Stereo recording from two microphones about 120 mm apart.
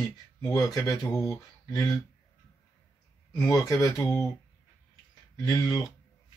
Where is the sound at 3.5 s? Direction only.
30° left (ahead or behind).